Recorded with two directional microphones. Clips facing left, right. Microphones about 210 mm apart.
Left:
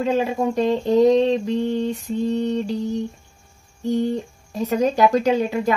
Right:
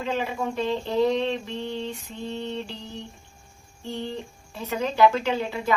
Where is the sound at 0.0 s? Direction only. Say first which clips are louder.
Left 7 dB; 40° left (ahead or behind).